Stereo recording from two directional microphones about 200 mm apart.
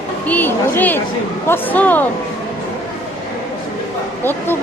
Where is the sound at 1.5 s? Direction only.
10° left (ahead or behind).